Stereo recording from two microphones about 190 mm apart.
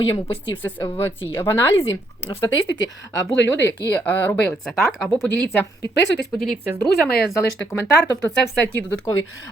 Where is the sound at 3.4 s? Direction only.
65° left (ahead or behind).